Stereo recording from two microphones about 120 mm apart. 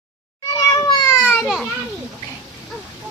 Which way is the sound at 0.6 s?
35° left (ahead or behind).